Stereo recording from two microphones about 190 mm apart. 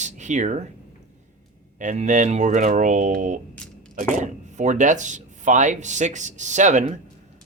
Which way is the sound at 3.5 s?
5° left (ahead or behind).